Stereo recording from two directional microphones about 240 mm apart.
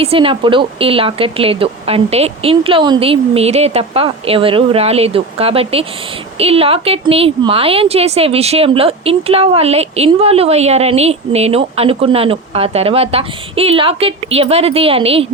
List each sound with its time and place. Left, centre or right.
0.0 s a woman's voice: right